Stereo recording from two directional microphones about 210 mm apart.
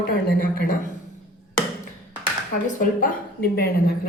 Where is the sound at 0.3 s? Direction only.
45° left (ahead or behind).